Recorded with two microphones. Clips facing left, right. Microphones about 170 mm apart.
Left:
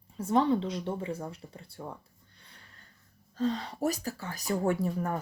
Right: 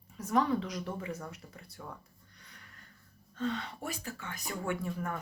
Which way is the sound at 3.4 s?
35° left (ahead or behind).